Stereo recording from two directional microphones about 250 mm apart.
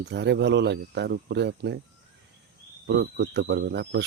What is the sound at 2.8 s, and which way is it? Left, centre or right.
Speech, right.